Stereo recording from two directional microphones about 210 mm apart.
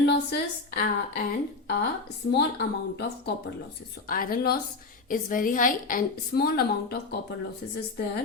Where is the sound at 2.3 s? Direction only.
50° left (ahead or behind).